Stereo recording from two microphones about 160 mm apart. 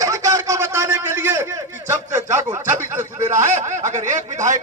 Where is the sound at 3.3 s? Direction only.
50° right (ahead or behind).